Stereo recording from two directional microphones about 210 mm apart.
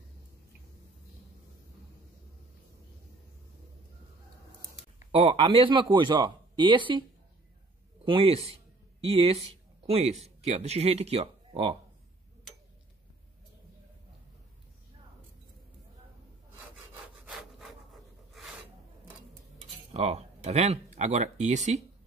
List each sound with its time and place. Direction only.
5.1 s a man's voice: 25° right (ahead or behind)
17.3 s sawing: centre (ahead or behind)
19.9 s speech: 30° right (ahead or behind)